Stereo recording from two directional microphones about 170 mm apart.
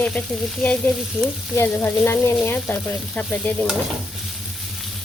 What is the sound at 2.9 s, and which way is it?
Speech, 5° left (ahead or behind).